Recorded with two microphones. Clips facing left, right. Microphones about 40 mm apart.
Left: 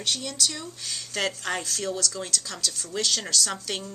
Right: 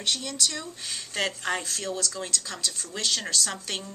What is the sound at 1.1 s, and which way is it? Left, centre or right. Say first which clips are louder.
Speech: even; centre.